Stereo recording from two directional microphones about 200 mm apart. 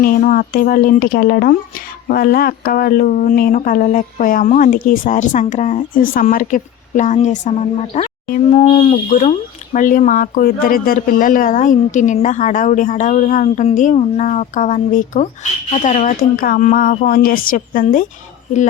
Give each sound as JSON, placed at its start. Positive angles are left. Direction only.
{"t": 0.0, "sound": "speech", "side_deg": 45}